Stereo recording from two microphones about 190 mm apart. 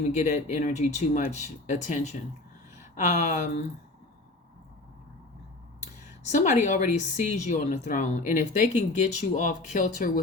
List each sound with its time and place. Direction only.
0.1 s speech: 35° left (ahead or behind)
5.8 s speech: 40° left (ahead or behind)